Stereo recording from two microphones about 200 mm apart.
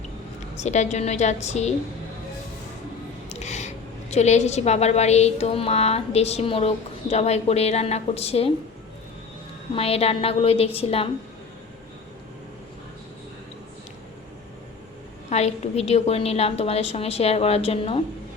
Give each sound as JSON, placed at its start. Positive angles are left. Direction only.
{"t": 0.5, "sound": "a woman's voice", "side_deg": 35}
{"t": 3.2, "sound": "music", "side_deg": 35}
{"t": 4.1, "sound": "a woman's voice", "side_deg": 35}
{"t": 9.7, "sound": "a woman's voice", "side_deg": 30}
{"t": 15.3, "sound": "a woman's voice", "side_deg": 35}